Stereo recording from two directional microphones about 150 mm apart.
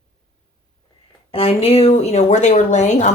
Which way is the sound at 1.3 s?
40° left (ahead or behind).